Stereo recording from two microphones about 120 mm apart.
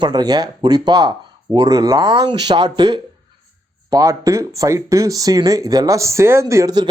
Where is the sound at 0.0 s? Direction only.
35° right (ahead or behind).